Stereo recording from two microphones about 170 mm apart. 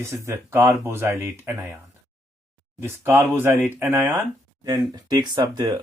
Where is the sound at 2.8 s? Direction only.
15° right (ahead or behind).